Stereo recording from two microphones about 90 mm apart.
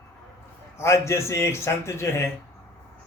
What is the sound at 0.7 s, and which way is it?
A man's voice, 30° left (ahead or behind).